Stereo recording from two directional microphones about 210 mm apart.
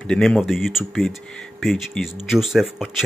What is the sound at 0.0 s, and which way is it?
Speech, 5° left (ahead or behind).